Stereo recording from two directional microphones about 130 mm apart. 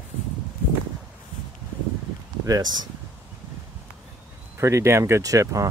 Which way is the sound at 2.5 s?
30° right (ahead or behind).